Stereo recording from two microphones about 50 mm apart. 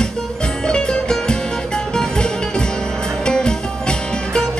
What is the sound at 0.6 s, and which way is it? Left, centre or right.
Music, centre.